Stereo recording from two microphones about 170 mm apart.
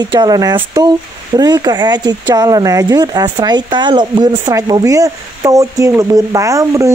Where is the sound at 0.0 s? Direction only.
25° right (ahead or behind).